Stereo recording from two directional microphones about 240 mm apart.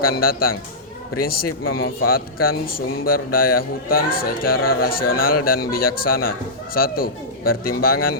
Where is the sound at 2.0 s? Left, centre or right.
Left.